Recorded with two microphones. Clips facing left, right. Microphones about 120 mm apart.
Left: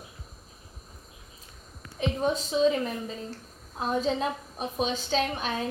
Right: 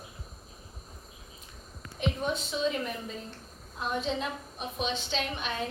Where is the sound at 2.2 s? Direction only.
35° left (ahead or behind).